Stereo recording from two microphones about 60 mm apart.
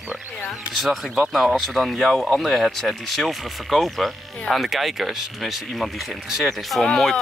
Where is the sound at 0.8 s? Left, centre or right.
Centre.